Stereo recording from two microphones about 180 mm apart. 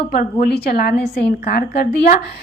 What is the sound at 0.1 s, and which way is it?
A woman's voice, 50° left (ahead or behind).